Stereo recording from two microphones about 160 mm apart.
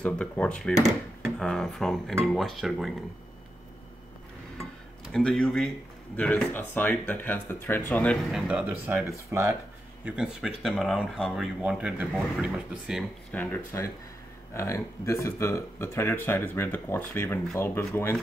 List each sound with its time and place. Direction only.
0.0 s speech: 5° left (ahead or behind)
5.1 s speech: 5° left (ahead or behind); by 9.6 s 15° right (ahead or behind)
10.0 s speech: 5° right (ahead or behind)
13.3 s speech: 10° left (ahead or behind)